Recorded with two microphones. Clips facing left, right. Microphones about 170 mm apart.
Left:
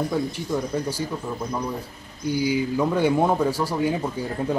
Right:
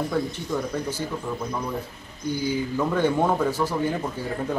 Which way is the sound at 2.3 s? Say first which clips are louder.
Left 3 dB; 10° left (ahead or behind).